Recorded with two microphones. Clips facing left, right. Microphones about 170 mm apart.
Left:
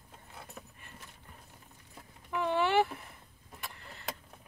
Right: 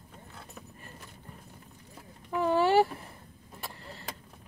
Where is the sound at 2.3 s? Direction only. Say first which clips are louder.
Right 4 dB; 40° right (ahead or behind).